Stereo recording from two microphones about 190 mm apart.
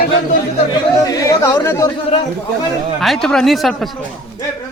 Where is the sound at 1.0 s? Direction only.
20° left (ahead or behind).